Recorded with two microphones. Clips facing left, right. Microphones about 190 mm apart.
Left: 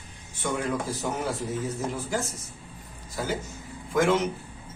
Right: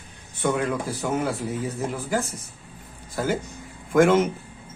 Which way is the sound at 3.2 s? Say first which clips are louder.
Right 5 dB; 55° right (ahead or behind).